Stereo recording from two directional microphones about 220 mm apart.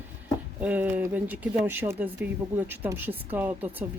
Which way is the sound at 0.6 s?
10° right (ahead or behind).